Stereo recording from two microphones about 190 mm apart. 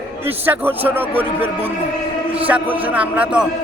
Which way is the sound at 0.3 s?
10° right (ahead or behind).